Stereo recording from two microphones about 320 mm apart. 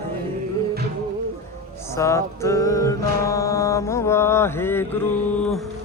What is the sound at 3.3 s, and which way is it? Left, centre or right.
Mantra, centre.